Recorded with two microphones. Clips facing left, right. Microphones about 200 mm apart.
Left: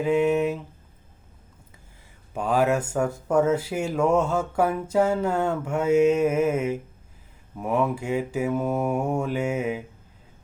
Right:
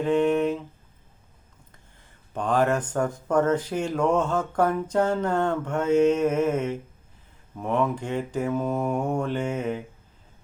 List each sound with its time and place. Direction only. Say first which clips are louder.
0.0 s speech: even; 5° left (ahead or behind)
2.3 s speech: left 1 dB; 10° left (ahead or behind)